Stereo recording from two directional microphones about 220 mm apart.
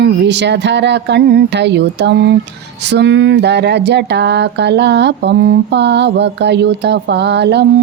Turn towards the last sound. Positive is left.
turn(degrees=-50)  # may be behind; listen again after turning